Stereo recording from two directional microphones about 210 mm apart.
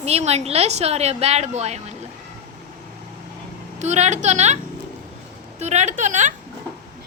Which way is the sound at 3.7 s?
35° right (ahead or behind).